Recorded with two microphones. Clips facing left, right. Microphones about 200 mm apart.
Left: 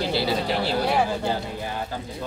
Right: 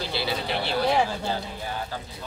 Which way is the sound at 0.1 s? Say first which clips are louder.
Left 4 dB; 40° left (ahead or behind).